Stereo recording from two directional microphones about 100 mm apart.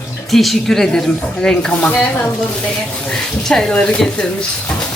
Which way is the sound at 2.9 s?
10° left (ahead or behind).